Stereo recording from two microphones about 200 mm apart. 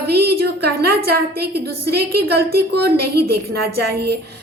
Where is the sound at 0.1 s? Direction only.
50° right (ahead or behind).